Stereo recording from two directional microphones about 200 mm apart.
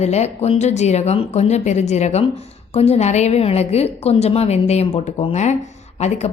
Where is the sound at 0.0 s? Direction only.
35° left (ahead or behind).